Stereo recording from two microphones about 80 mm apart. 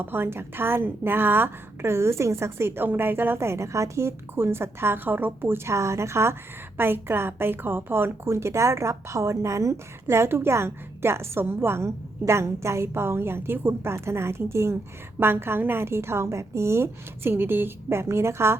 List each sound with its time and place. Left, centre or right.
0.0 s a woman's voice: right